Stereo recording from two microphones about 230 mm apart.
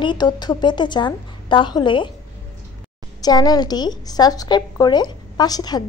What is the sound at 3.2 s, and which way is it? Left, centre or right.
A woman's voice, centre.